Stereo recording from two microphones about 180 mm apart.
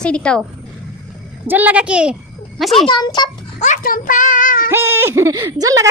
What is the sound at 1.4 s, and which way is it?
A child's voice, 10° right (ahead or behind).